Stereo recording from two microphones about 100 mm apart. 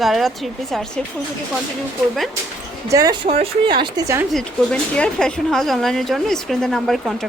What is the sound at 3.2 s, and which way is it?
Speech, 80° right.